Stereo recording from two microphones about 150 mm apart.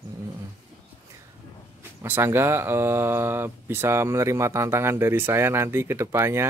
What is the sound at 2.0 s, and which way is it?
Speech, 15° right (ahead or behind).